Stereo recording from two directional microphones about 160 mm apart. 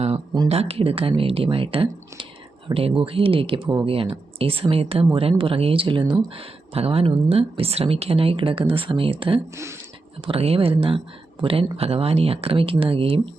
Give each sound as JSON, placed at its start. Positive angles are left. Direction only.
{"t": 0.4, "sound": "speech", "side_deg": -40}